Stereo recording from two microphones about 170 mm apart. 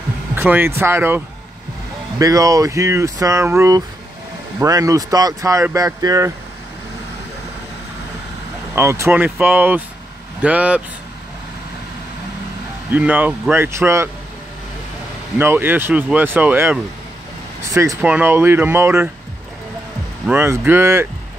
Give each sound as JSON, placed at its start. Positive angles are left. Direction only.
{"t": 0.4, "sound": "speech", "side_deg": -10}
{"t": 8.7, "sound": "speech", "side_deg": -15}
{"t": 12.9, "sound": "speech", "side_deg": -10}
{"t": 15.3, "sound": "speech", "side_deg": -10}
{"t": 17.7, "sound": "speech", "side_deg": -15}
{"t": 20.2, "sound": "speech", "side_deg": -15}